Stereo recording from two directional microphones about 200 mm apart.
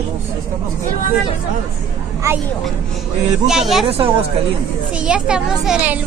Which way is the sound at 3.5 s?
Centre (ahead or behind).